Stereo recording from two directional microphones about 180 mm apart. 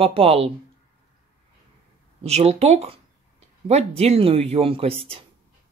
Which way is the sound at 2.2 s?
35° right (ahead or behind).